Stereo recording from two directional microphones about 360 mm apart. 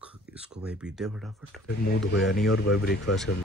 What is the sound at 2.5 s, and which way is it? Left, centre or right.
Speech, left.